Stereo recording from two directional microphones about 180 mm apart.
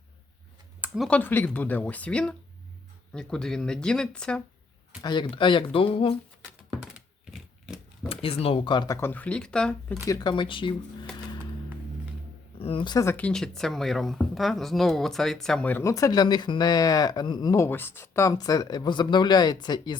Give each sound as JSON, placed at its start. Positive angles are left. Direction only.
{"t": 0.8, "sound": "speech", "side_deg": 0}
{"t": 5.0, "sound": "speech", "side_deg": 25}
{"t": 8.1, "sound": "speech", "side_deg": 30}
{"t": 9.0, "sound": "speech", "side_deg": 10}
{"t": 10.1, "sound": "speech", "side_deg": 25}
{"t": 12.5, "sound": "speech", "side_deg": 30}